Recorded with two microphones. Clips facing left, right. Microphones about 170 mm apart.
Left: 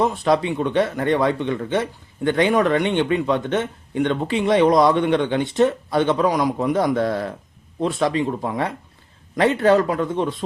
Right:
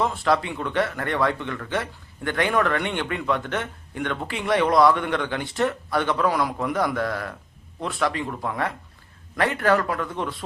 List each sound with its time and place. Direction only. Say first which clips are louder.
0.0 s speech: left 4 dB; 20° left (ahead or behind)